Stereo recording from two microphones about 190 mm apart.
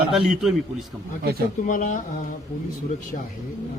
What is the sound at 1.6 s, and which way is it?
Speech, 45° left (ahead or behind).